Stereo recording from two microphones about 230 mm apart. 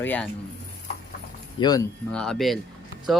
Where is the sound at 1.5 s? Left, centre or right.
Centre.